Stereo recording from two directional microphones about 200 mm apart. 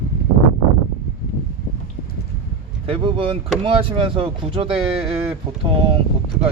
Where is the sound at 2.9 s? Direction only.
25° right (ahead or behind).